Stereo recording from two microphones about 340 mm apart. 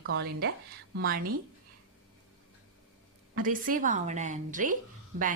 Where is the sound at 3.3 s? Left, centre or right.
Right.